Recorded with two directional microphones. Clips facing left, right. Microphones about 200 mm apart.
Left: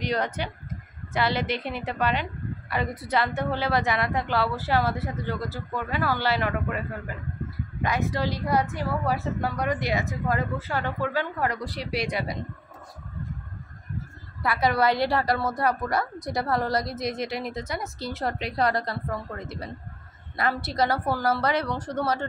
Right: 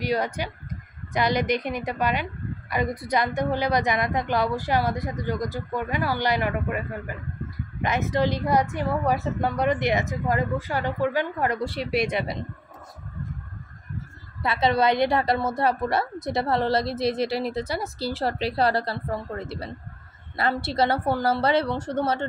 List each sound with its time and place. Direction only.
0.0 s a woman's voice: 10° right (ahead or behind)
7.8 s a woman's voice: 20° right (ahead or behind)
14.4 s a woman's voice: 25° right (ahead or behind)